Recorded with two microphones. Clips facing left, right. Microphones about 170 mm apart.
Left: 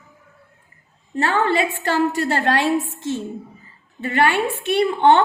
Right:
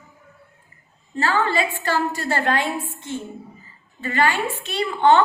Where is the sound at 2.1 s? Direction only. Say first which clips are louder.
Left 3 dB; 75° left (ahead or behind).